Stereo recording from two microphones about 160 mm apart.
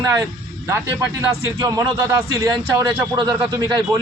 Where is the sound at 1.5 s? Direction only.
25° right (ahead or behind).